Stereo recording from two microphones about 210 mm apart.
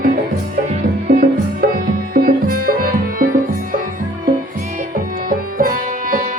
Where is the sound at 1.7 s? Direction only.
45° right (ahead or behind).